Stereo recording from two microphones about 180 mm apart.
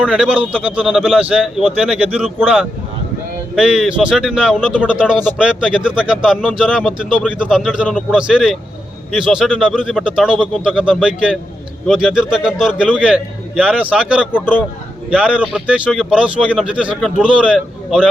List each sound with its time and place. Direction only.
0.0 s a man's voice: 5° right (ahead or behind)